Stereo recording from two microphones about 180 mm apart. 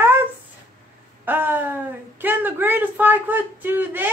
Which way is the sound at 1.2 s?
10° right (ahead or behind).